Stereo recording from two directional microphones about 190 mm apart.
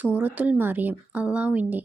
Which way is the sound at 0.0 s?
10° right (ahead or behind).